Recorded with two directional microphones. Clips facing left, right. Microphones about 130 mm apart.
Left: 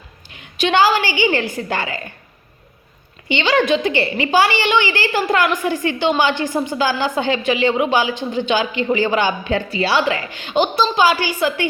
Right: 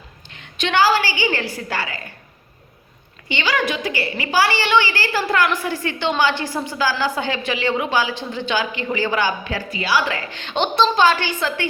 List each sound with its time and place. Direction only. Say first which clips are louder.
0.3 s a woman's voice: left 5 dB; 10° left (ahead or behind)
3.2 s a woman's voice: left 6 dB; 25° left (ahead or behind)
10.3 s a woman's voice: left 1 dB; 10° left (ahead or behind)